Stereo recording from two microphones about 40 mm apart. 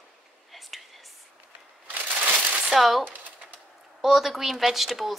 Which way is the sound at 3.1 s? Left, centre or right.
Right.